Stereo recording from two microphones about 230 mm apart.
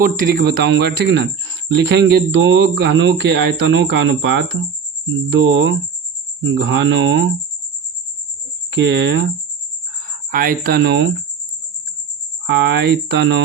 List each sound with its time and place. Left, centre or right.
0.0 s speech: right
8.7 s speech: right
10.3 s speech: right
12.5 s speech: right